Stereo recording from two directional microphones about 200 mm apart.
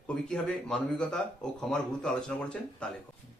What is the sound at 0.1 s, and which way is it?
Speech, 5° left (ahead or behind).